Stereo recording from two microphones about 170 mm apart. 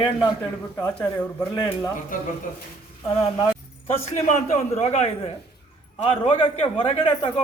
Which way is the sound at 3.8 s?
40° left (ahead or behind).